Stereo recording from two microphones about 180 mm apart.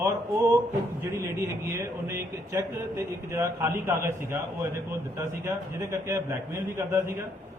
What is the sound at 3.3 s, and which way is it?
Speech, 15° right (ahead or behind).